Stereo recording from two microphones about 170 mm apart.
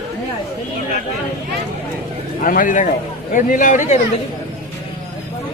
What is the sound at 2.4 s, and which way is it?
A man's voice, 55° left (ahead or behind).